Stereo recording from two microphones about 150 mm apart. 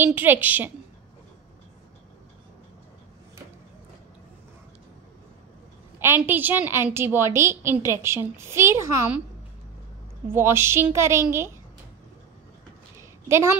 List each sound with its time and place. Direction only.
0.0 s a woman's voice: 15° right (ahead or behind)
5.9 s a woman's voice: 15° right (ahead or behind)
10.2 s a woman's voice: 15° right (ahead or behind)
13.3 s a woman's voice: 15° right (ahead or behind)